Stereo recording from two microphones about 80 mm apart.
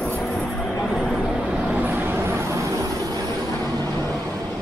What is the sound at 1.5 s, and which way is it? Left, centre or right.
Vehicle, centre.